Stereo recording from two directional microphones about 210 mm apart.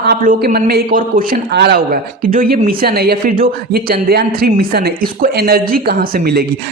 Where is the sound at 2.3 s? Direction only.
40° right (ahead or behind).